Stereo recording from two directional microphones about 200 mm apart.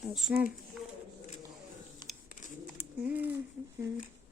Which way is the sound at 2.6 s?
5° right (ahead or behind).